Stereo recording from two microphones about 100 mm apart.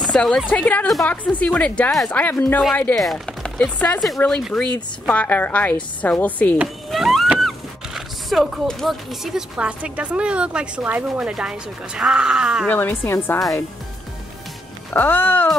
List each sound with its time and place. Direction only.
0.0 s a sound: 5° left (ahead or behind)
0.5 s a woman's voice: 15° left (ahead or behind)
3.0 s chopping: 5° left (ahead or behind)
4.7 s a woman's voice: 15° left (ahead or behind)
6.9 s vehicle: centre (ahead or behind)
7.3 s speech: centre (ahead or behind)
12.6 s a woman's voice: 20° left (ahead or behind)
14.9 s a woman's voice: 20° left (ahead or behind)